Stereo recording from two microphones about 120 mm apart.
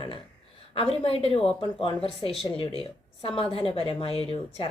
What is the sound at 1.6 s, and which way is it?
A woman's voice, 40° left (ahead or behind).